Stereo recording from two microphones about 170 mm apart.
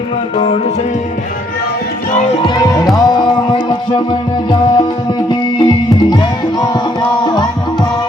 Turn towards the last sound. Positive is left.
turn(degrees=25)  # may be behind; listen again after turning